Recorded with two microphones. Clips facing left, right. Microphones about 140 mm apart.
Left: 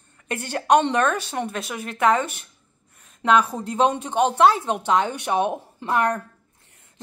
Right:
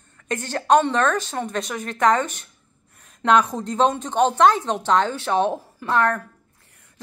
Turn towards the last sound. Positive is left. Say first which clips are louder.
# right 1 dB
turn(degrees=20)  # may be behind; listen again after turning